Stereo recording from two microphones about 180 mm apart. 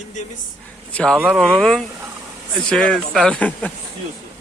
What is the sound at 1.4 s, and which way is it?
Speech, 5° left (ahead or behind).